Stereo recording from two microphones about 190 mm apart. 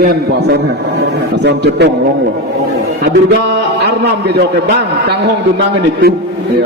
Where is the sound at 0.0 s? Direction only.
55° right (ahead or behind).